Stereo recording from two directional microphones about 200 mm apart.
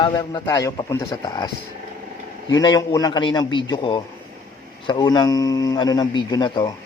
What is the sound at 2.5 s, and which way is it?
A man's voice, 20° left (ahead or behind).